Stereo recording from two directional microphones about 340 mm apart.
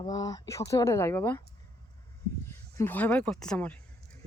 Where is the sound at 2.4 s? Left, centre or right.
Centre.